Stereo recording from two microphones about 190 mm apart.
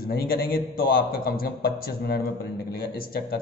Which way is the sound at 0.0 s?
55° left (ahead or behind).